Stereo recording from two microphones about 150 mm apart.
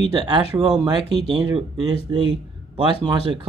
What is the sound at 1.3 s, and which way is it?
Speech, 40° right (ahead or behind).